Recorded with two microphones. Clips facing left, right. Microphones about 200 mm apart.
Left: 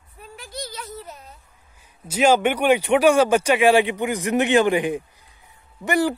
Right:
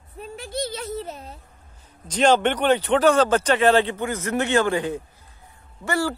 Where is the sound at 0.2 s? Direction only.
25° right (ahead or behind).